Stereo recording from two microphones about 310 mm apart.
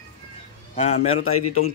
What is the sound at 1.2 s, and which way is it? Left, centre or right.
Speech, left.